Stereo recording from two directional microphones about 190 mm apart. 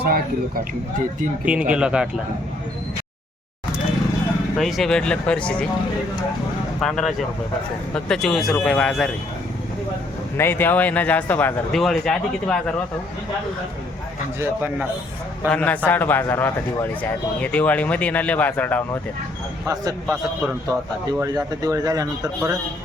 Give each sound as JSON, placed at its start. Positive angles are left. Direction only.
{"t": 0.0, "sound": "speech", "side_deg": -50}
{"t": 1.5, "sound": "speech", "side_deg": -5}
{"t": 4.5, "sound": "speech", "side_deg": 0}
{"t": 6.7, "sound": "speech", "side_deg": 0}
{"t": 10.3, "sound": "speech", "side_deg": 10}
{"t": 14.3, "sound": "a man's voice", "side_deg": -10}
{"t": 15.4, "sound": "speech", "side_deg": 5}
{"t": 19.6, "sound": "a man's voice", "side_deg": -15}